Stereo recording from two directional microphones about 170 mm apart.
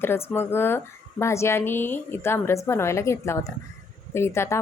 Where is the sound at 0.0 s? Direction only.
15° left (ahead or behind).